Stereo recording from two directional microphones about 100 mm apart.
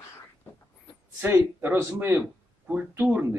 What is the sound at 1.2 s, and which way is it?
A man's voice, 25° right (ahead or behind).